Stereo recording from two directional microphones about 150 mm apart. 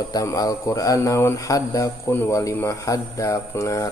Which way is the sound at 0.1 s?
25° left (ahead or behind).